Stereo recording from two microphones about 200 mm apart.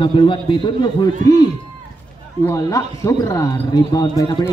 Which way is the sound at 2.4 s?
15° left (ahead or behind).